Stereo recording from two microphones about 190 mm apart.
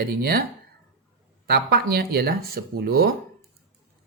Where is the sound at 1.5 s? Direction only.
60° right (ahead or behind).